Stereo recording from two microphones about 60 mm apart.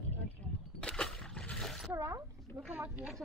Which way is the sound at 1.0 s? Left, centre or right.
Centre.